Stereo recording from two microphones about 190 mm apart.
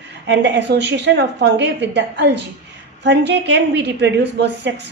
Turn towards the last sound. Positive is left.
turn(degrees=-70)  # may be behind; listen again after turning